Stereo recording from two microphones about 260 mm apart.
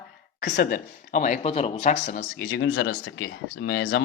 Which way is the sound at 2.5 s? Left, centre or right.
Left.